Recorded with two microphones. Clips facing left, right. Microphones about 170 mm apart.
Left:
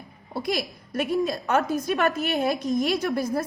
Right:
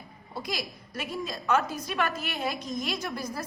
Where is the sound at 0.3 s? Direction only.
60° left (ahead or behind).